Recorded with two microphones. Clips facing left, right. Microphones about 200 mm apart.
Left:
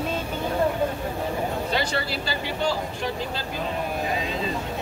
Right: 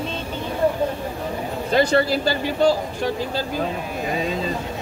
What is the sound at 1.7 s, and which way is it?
Speech, 45° right (ahead or behind).